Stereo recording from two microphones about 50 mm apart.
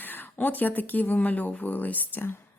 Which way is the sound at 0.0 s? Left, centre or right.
Left.